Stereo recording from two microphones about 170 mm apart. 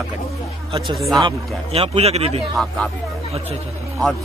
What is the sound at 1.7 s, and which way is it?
Speech, 35° right (ahead or behind).